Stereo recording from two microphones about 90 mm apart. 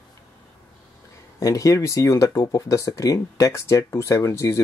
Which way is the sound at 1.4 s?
40° left (ahead or behind).